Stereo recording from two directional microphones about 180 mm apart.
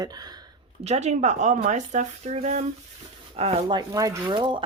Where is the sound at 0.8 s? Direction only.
40° right (ahead or behind).